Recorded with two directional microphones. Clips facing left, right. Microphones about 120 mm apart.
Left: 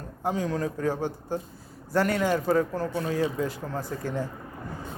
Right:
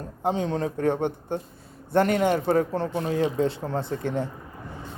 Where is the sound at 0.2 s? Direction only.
25° right (ahead or behind).